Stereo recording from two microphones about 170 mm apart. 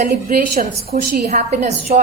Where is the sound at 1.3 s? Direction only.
40° right (ahead or behind).